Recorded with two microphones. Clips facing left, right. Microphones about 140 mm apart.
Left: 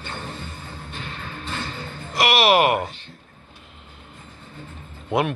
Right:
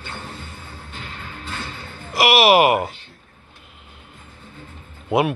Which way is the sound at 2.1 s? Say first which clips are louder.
Right 3 dB; 10° right (ahead or behind).